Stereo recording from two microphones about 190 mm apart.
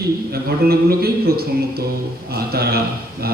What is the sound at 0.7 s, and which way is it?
A man's voice, 55° right (ahead or behind).